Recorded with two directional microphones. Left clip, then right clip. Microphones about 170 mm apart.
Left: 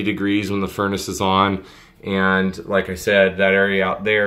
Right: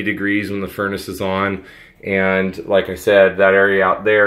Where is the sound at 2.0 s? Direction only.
65° left (ahead or behind).